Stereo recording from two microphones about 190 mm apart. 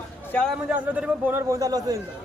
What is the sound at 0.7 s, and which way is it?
A man's voice, 10° right (ahead or behind).